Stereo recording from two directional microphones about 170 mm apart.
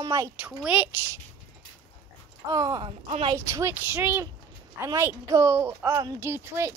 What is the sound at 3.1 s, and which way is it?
Speech, 35° right (ahead or behind).